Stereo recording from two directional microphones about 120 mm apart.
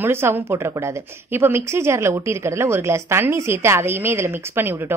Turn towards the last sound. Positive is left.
turn(degrees=-20)  # may be behind; listen again after turning